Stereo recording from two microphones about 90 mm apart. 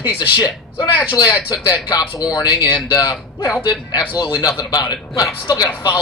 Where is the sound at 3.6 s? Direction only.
50° left (ahead or behind).